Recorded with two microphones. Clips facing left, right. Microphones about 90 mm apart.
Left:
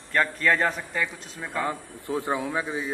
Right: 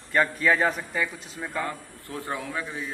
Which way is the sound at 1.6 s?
20° left (ahead or behind).